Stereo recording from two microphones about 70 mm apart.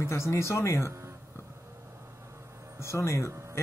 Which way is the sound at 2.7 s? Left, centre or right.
Left.